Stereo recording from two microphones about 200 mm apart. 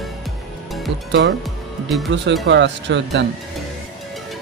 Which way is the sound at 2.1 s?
65° right (ahead or behind).